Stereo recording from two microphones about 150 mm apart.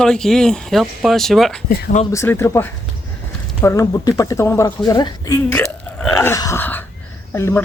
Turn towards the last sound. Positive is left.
turn(degrees=15)  # may be behind; listen again after turning